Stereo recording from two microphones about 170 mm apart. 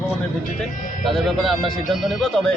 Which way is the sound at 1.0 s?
Centre (ahead or behind).